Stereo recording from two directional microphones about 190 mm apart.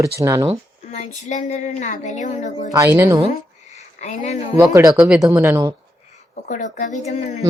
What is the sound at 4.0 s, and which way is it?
Speech, 35° left (ahead or behind).